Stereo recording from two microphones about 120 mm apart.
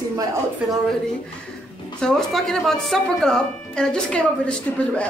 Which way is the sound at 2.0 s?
5° left (ahead or behind).